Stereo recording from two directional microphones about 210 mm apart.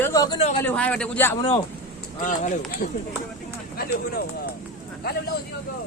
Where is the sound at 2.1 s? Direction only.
40° left (ahead or behind).